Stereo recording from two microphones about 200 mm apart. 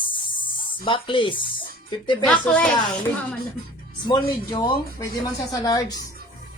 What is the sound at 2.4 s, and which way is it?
Speech, 5° left (ahead or behind).